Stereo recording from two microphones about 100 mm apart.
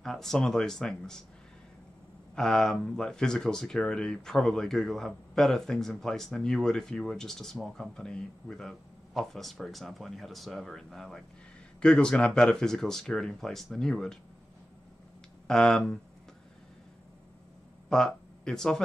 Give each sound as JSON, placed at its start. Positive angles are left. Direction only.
{"t": 0.0, "sound": "speech", "side_deg": 5}
{"t": 2.3, "sound": "speech", "side_deg": 5}
{"t": 15.4, "sound": "speech", "side_deg": 5}
{"t": 17.8, "sound": "speech", "side_deg": 5}